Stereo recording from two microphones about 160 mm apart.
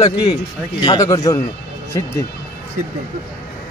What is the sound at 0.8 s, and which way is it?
Speech, 25° left (ahead or behind).